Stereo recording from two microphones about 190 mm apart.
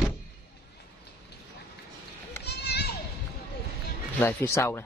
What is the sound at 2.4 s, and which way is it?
Children playing, 60° left (ahead or behind).